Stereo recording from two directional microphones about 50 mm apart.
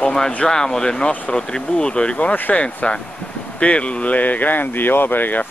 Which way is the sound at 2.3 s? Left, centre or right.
Left.